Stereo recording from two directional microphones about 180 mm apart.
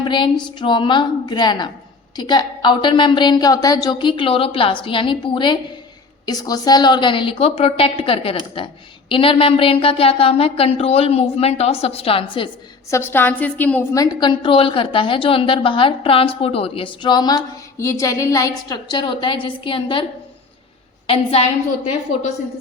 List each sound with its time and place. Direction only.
0.0 s a sound: 25° left (ahead or behind)
0.5 s a woman's voice: 25° left (ahead or behind)
12.9 s a woman's voice: 10° left (ahead or behind); by 20.1 s 30° left (ahead or behind)
21.1 s a woman's voice: 30° left (ahead or behind)